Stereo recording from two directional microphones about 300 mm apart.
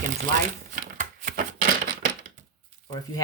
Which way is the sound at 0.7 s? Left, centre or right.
Right.